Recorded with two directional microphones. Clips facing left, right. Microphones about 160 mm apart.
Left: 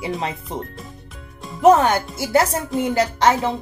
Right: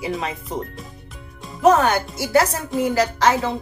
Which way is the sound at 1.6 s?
25° left (ahead or behind).